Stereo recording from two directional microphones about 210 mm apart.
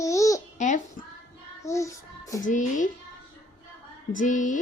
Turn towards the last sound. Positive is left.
turn(degrees=35)  # may be behind; listen again after turning